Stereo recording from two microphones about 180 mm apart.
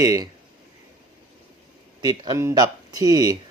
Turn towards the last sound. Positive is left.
turn(degrees=-20)  # may be behind; listen again after turning